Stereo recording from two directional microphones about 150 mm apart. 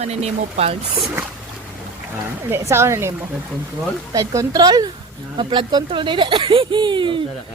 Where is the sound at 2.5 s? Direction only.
15° right (ahead or behind).